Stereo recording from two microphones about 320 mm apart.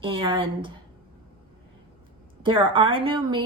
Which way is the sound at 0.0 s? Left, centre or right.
Centre.